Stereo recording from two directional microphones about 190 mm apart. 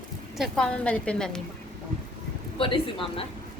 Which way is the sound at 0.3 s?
Centre (ahead or behind).